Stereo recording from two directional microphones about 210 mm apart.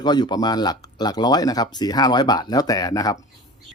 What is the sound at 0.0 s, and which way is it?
Speech, 20° left (ahead or behind).